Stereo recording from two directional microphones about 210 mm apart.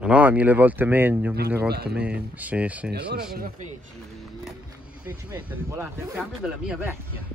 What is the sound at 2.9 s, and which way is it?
Speech, 50° right (ahead or behind).